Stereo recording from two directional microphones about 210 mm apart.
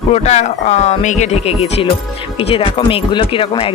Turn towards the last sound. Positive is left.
turn(degrees=25)  # may be behind; listen again after turning